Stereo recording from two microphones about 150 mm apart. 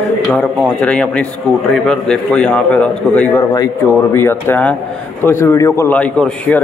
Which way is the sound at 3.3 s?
25° left (ahead or behind).